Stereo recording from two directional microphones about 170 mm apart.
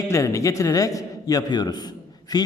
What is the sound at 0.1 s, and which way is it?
A man's voice, 20° left (ahead or behind).